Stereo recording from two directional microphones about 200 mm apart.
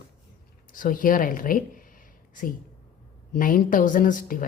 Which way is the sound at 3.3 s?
45° left (ahead or behind).